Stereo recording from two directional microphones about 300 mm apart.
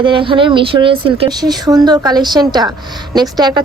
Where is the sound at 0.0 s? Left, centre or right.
Centre.